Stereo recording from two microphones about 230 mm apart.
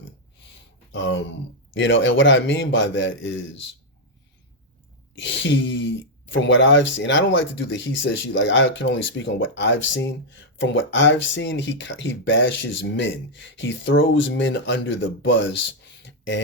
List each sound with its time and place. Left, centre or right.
0.9 s speech: left
5.1 s speech: left